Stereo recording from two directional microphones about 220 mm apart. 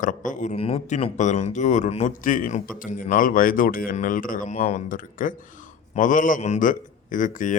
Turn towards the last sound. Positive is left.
turn(degrees=35)  # may be behind; listen again after turning